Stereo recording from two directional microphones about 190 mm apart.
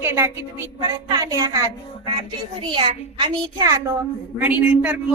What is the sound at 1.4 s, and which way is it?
A woman's voice, 20° right (ahead or behind).